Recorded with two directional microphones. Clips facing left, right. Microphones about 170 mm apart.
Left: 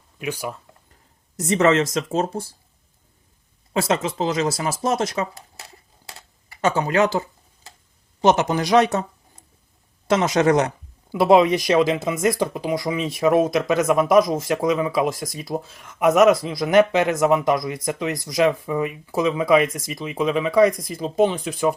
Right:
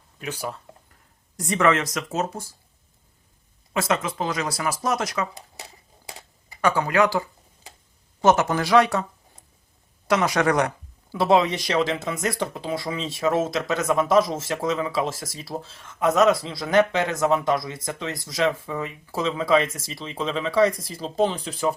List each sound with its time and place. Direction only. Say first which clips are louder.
1.4 s speech: left 4 dB; 25° left (ahead or behind)
3.7 s speech: left 3 dB; 30° left (ahead or behind)
6.1 s a sound: right 2 dB; 15° right (ahead or behind)
6.6 s speech: left 1 dB; 25° left (ahead or behind)
10.1 s speech: left 3 dB; 25° left (ahead or behind); by 21.2 s 10° left (ahead or behind)